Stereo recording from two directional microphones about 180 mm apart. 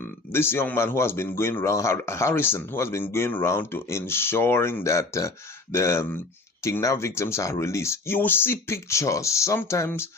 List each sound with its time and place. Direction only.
0.0 s speech: 15° left (ahead or behind)